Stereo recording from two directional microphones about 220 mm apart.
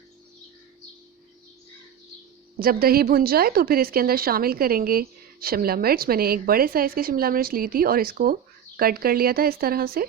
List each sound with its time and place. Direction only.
2.6 s a woman's voice: 40° right (ahead or behind)